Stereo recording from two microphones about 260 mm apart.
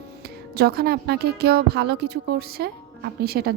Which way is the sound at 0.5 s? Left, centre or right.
Right.